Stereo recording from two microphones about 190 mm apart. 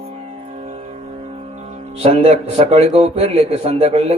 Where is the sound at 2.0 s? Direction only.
35° right (ahead or behind).